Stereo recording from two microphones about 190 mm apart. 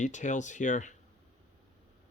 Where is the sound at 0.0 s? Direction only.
40° left (ahead or behind).